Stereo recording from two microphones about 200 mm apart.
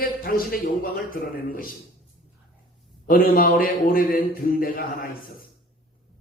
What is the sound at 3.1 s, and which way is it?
Speech, 45° left (ahead or behind).